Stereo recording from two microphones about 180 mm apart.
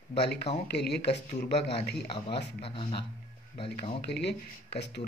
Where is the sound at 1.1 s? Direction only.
40° left (ahead or behind).